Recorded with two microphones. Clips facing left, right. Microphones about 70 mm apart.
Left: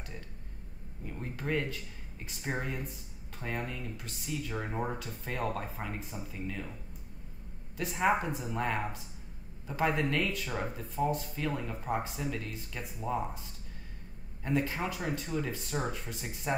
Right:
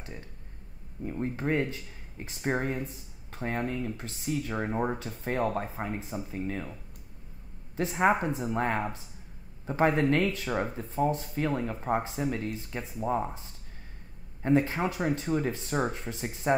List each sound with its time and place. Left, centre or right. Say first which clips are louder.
1.0 s speech: right 7 dB; right
8.3 s speech: right 4 dB; right
14.4 s speech: right 6 dB; right